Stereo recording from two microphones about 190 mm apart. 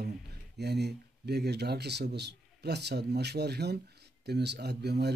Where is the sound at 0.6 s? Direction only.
60° right (ahead or behind).